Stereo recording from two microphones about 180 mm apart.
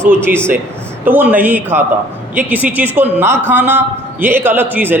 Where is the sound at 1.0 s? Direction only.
10° right (ahead or behind).